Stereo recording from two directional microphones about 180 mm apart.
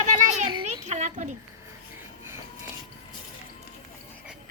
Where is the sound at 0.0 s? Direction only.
45° right (ahead or behind).